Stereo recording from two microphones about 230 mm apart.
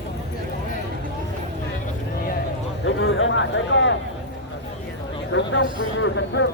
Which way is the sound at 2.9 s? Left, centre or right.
Left.